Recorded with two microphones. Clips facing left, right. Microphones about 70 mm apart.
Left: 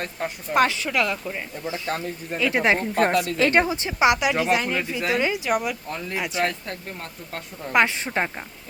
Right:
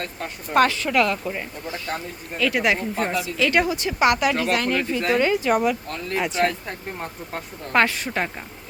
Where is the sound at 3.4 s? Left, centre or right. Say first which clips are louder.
Right 2 dB; left; by 6.5 s centre.